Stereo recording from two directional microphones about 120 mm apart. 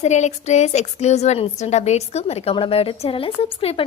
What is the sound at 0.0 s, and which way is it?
A woman's voice, 70° left (ahead or behind).